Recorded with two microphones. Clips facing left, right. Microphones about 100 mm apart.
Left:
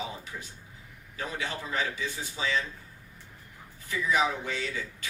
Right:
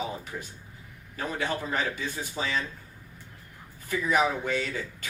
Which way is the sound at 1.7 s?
50° right (ahead or behind).